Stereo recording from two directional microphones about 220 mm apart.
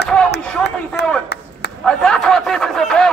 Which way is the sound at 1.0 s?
50° left (ahead or behind).